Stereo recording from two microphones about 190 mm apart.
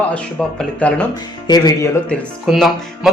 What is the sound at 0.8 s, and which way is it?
Speech, 5° left (ahead or behind).